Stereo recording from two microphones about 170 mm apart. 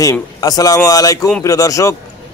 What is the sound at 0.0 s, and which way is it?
A man's voice, 20° left (ahead or behind).